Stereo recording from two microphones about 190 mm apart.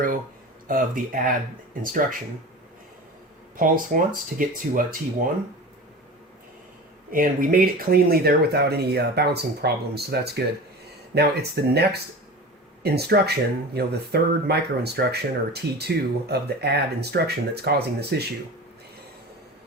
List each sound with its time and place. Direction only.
0.7 s speech: 45° right (ahead or behind)
3.6 s speech: 45° right (ahead or behind)
7.1 s speech: 45° right (ahead or behind)
12.8 s speech: 60° right (ahead or behind)